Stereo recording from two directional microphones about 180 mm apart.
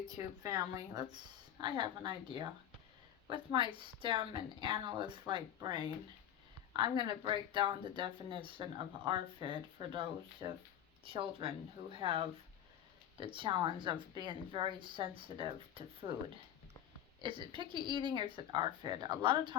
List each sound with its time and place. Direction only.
0.1 s speech: 20° right (ahead or behind)
17.2 s speech: 25° right (ahead or behind)